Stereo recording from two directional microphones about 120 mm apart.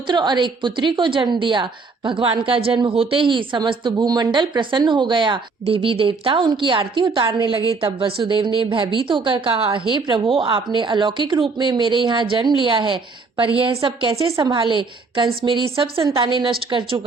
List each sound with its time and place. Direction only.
0.1 s a woman's voice: 40° right (ahead or behind)